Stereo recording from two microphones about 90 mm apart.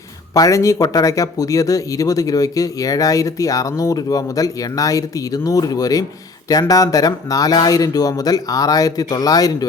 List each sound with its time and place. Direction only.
0.3 s speech: 40° left (ahead or behind)